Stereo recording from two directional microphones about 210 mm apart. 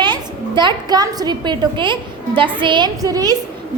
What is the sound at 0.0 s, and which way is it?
A child's voice, 20° right (ahead or behind).